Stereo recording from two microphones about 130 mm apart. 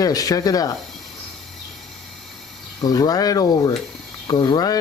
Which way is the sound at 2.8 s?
30° left (ahead or behind).